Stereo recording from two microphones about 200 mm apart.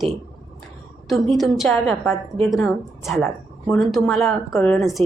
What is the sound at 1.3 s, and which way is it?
A woman's voice, centre (ahead or behind).